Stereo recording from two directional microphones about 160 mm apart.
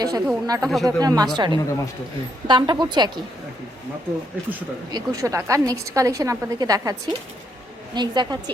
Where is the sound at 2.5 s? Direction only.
30° right (ahead or behind).